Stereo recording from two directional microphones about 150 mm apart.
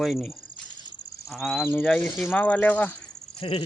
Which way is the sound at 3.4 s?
35° left (ahead or behind).